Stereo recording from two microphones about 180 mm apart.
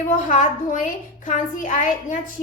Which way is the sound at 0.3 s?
45° left (ahead or behind).